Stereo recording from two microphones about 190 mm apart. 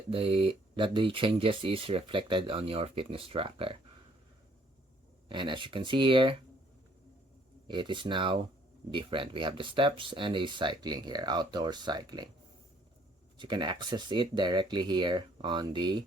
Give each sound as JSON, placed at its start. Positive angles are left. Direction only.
{"t": 0.1, "sound": "speech", "side_deg": -30}
{"t": 5.3, "sound": "speech", "side_deg": -25}
{"t": 7.7, "sound": "speech", "side_deg": -25}
{"t": 13.4, "sound": "speech", "side_deg": -25}